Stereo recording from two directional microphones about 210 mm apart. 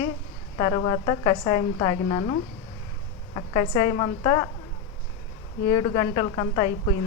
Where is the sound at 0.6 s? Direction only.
20° left (ahead or behind).